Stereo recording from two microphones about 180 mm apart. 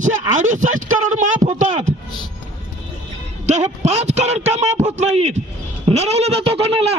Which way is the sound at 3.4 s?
40° right (ahead or behind).